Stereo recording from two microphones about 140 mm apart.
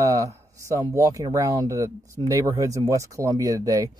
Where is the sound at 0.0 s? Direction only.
25° right (ahead or behind).